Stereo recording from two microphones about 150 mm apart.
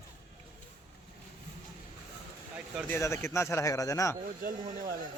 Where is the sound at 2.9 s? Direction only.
20° left (ahead or behind).